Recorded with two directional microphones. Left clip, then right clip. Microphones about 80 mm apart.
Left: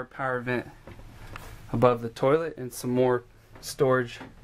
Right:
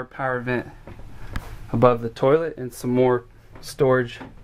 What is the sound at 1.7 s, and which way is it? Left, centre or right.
Speech, centre.